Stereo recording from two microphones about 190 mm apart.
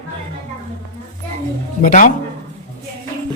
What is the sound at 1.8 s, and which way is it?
Speech, 45° left (ahead or behind).